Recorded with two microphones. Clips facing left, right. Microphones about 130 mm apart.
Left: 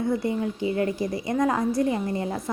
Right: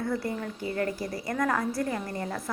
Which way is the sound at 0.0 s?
20° left (ahead or behind).